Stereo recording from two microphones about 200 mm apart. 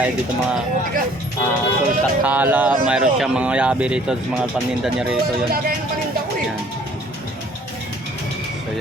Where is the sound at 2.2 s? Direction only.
10° right (ahead or behind).